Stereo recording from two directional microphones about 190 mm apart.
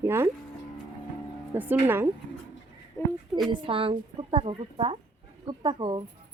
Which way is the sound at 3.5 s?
30° right (ahead or behind).